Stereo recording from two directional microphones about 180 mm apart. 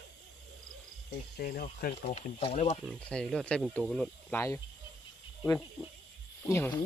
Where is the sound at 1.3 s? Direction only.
55° left (ahead or behind).